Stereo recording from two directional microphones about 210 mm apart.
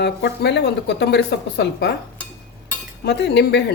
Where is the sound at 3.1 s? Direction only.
55° left (ahead or behind).